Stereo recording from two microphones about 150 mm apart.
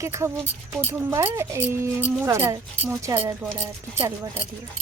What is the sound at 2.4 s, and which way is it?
Speech, 30° right (ahead or behind).